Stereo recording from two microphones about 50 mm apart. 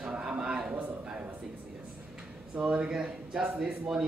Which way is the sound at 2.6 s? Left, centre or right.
Centre.